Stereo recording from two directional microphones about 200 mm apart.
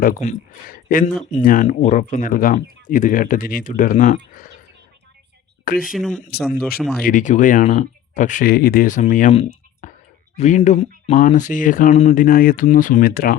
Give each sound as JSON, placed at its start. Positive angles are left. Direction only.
{"t": 0.0, "sound": "speech", "side_deg": 40}
{"t": 5.8, "sound": "speech", "side_deg": 0}
{"t": 7.0, "sound": "speech", "side_deg": 40}
{"t": 9.3, "sound": "clicking", "side_deg": 35}
{"t": 10.3, "sound": "speech", "side_deg": 35}